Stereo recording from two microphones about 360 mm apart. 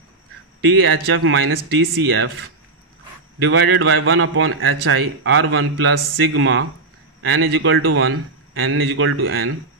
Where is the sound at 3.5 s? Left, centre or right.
Right.